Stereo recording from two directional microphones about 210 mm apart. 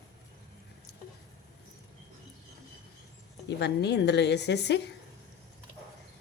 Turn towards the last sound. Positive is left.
turn(degrees=55)  # may be behind; listen again after turning